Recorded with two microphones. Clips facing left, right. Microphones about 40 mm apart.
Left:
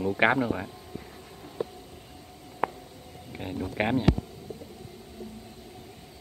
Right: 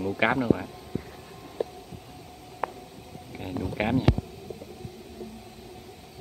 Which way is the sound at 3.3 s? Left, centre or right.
Centre.